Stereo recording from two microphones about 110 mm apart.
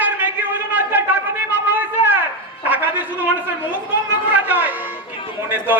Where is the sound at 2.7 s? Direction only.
15° right (ahead or behind).